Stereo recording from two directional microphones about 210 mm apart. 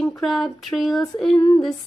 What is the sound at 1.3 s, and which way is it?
Speech, 25° left (ahead or behind).